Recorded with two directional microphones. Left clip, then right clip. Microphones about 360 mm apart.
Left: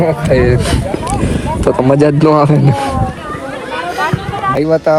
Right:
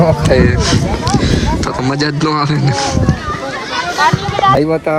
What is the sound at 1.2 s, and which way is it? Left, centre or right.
A man's voice, centre.